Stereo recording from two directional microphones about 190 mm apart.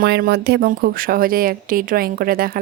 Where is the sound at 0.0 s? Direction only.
55° right (ahead or behind).